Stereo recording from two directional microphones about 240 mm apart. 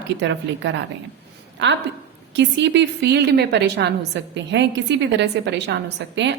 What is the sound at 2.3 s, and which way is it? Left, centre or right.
A woman's voice, right.